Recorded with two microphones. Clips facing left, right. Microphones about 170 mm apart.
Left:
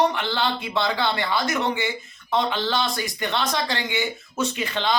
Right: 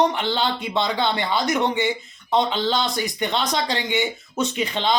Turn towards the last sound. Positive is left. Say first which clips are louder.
# right 2 dB
turn(degrees=-20)  # may be behind; listen again after turning